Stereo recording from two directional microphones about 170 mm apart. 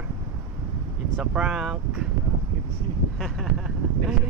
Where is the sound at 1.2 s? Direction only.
5° right (ahead or behind).